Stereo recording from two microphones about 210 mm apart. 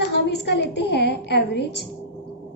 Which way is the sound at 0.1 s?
50° left (ahead or behind).